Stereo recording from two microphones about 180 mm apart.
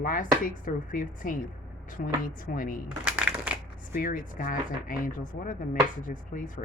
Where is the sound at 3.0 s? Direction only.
5° right (ahead or behind).